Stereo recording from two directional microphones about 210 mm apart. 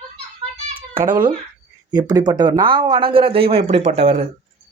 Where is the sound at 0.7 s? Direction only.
10° right (ahead or behind).